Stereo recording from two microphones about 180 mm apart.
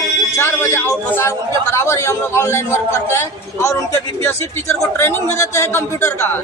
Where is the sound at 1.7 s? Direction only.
15° left (ahead or behind).